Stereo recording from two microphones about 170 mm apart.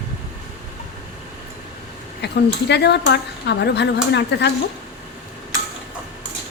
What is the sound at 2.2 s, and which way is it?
Speech, 80° left.